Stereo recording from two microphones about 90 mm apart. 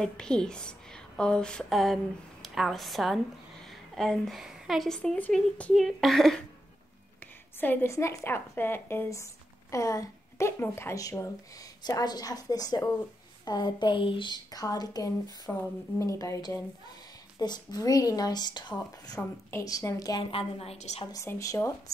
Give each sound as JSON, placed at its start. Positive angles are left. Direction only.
{"t": 0.0, "sound": "a woman's voice", "side_deg": 10}
{"t": 7.6, "sound": "a woman's voice", "side_deg": 20}
{"t": 7.9, "sound": "a woman's voice", "side_deg": 35}
{"t": 14.5, "sound": "a woman's voice", "side_deg": 45}
{"t": 15.5, "sound": "a woman's voice", "side_deg": 20}
{"t": 16.0, "sound": "a woman's voice", "side_deg": 35}
{"t": 19.2, "sound": "speech", "side_deg": 15}
{"t": 19.6, "sound": "speech", "side_deg": 40}
{"t": 20.2, "sound": "a woman's voice", "side_deg": 90}
{"t": 21.3, "sound": "speech", "side_deg": 35}